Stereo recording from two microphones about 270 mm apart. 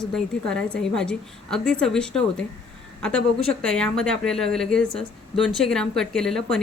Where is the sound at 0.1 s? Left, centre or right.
Centre.